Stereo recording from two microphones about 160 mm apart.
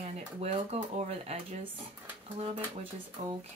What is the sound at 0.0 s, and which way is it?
Speech, 40° right (ahead or behind).